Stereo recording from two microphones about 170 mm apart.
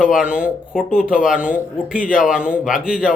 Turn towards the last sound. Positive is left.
turn(degrees=-5)  # may be behind; listen again after turning